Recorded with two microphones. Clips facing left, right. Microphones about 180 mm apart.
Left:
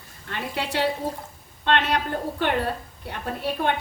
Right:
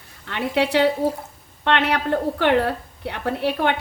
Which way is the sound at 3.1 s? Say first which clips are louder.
Right 5 dB; 70° right (ahead or behind).